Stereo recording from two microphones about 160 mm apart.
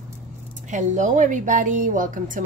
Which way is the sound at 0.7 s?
50° right (ahead or behind).